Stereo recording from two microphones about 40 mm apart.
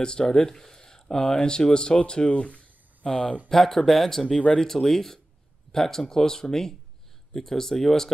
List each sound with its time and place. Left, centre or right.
0.0 s speech: centre
3.4 s speech: centre
4.4 s speech: centre